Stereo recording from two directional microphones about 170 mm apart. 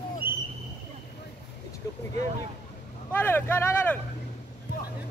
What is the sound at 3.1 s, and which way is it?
Speech, 10° left (ahead or behind).